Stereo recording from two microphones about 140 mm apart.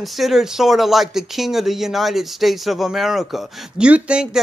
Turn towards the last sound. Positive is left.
turn(degrees=-5)  # may be behind; listen again after turning